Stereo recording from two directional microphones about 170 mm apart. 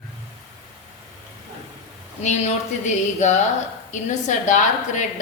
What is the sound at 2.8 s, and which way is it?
A woman's voice, 45° left (ahead or behind).